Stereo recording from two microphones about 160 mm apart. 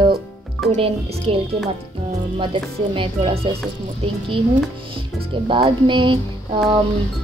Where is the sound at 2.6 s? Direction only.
30° right (ahead or behind).